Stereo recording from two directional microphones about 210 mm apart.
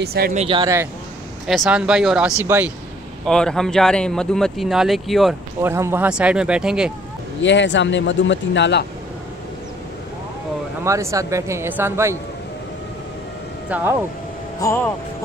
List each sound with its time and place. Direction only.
0.0 s speech: 50° right (ahead or behind)
0.3 s speech: 30° right (ahead or behind)
1.5 s speech: centre (ahead or behind)
3.3 s speech: 5° left (ahead or behind)
5.6 s speech: 10° right (ahead or behind)
7.4 s a man's voice: 60° left (ahead or behind)
10.8 s speech: 15° right (ahead or behind)
14.6 s speech: 15° left (ahead or behind)